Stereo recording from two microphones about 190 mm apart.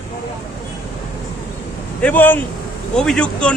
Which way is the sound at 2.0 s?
10° left (ahead or behind).